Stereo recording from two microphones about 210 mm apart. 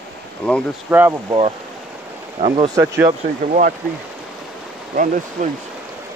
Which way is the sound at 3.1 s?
40° right (ahead or behind).